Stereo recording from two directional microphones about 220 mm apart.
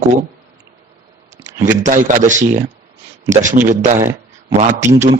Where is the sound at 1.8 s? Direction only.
35° right (ahead or behind).